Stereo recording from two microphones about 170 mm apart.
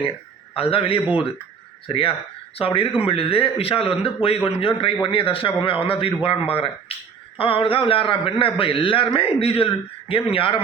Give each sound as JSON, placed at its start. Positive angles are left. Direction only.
{"t": 0.5, "sound": "a man's voice", "side_deg": 35}